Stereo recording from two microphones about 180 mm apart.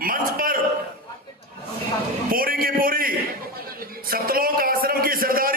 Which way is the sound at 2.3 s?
55° right (ahead or behind).